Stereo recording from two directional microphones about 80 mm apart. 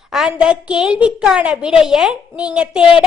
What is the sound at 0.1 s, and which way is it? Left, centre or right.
A woman's voice, centre.